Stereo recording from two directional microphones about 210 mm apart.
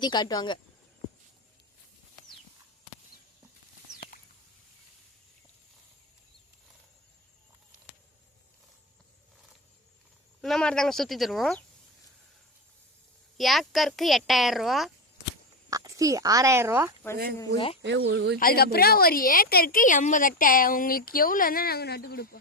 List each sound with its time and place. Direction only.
0.0 s speech: 20° left (ahead or behind)
10.4 s speech: 5° left (ahead or behind)
13.3 s speech: centre (ahead or behind)
15.7 s speech: 15° right (ahead or behind)
17.8 s speech: 60° right (ahead or behind)
18.3 s a woman's voice: 45° left (ahead or behind)